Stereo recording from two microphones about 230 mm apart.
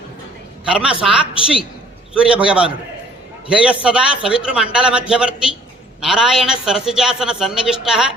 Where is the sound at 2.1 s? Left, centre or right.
Centre.